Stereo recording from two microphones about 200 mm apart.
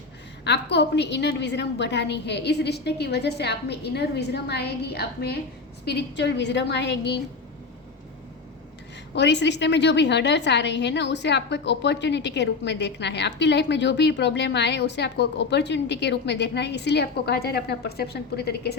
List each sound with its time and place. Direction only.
0.4 s a woman's voice: 60° left (ahead or behind)
9.1 s a woman's voice: 60° left (ahead or behind)